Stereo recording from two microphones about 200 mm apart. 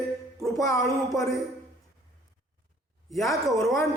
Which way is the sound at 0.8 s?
Centre (ahead or behind).